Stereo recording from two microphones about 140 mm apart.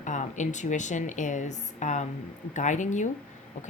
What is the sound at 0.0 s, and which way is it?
Speech, 60° left (ahead or behind).